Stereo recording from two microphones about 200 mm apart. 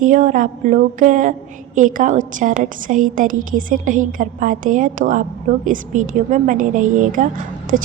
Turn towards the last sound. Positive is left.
turn(degrees=-40)  # may be behind; listen again after turning